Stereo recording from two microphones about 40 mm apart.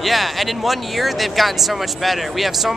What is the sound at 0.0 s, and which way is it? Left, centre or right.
Speech, centre.